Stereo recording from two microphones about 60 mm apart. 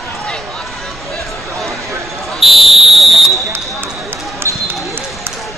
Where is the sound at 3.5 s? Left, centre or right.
Right.